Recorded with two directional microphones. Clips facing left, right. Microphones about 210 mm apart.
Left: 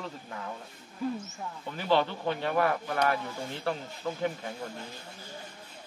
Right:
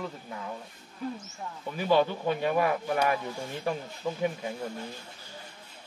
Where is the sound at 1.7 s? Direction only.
10° right (ahead or behind).